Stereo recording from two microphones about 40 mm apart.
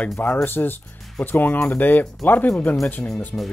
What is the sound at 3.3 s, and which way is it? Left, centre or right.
Speech, left.